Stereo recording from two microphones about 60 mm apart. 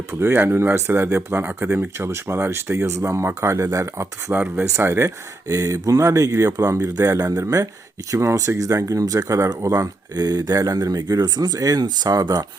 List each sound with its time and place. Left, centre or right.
0.1 s speech: right
2.0 s speech: right
4.3 s speech: right
4.8 s speech: right
5.5 s speech: right